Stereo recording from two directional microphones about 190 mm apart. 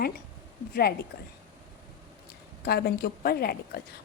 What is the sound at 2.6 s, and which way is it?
Speech, 55° left (ahead or behind).